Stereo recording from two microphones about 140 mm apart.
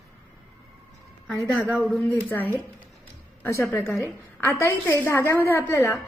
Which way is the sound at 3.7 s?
15° left (ahead or behind).